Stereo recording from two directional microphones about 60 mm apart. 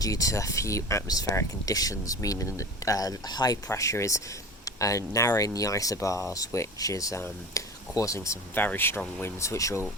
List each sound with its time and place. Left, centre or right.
0.0 s speech: left
1.0 s speech: left
3.7 s speech: left
8.5 s speech: left
9.4 s speech: left